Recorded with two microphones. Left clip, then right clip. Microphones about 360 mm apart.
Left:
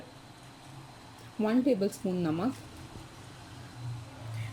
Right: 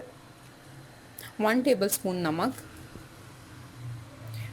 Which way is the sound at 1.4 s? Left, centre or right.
Right.